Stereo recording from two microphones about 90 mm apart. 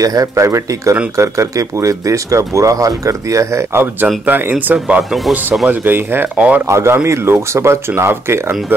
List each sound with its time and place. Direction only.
0.0 s speech: 40° right (ahead or behind); by 8.7 s 25° right (ahead or behind)